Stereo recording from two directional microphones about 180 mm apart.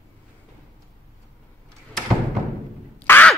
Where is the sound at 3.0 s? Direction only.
10° left (ahead or behind).